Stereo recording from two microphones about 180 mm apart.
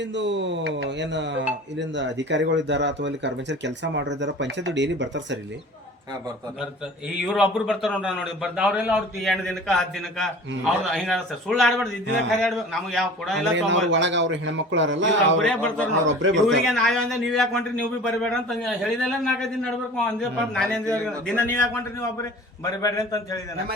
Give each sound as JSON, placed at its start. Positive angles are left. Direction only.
{"t": 0.0, "sound": "speech", "side_deg": -80}
{"t": 7.2, "sound": "a man's voice", "side_deg": -5}
{"t": 13.7, "sound": "a man's voice", "side_deg": -90}
{"t": 15.4, "sound": "a man's voice", "side_deg": 5}
{"t": 16.0, "sound": "a man's voice", "side_deg": -90}
{"t": 16.6, "sound": "a man's voice", "side_deg": 0}